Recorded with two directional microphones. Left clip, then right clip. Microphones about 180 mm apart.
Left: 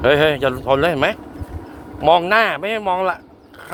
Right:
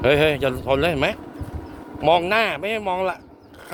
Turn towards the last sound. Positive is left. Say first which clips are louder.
# left 4 dB
turn(degrees=-15)  # may be behind; listen again after turning